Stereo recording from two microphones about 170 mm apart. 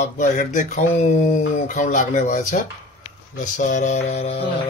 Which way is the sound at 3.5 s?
50° left (ahead or behind).